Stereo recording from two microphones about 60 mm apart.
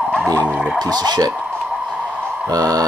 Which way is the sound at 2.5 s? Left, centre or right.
Right.